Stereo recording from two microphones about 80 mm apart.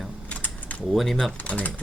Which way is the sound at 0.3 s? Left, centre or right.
Centre.